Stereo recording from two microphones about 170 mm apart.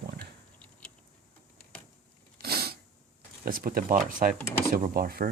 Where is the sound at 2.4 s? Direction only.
65° right (ahead or behind).